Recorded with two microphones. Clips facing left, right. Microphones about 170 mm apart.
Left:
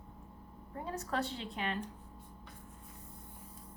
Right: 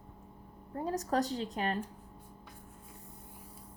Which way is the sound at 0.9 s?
40° right (ahead or behind).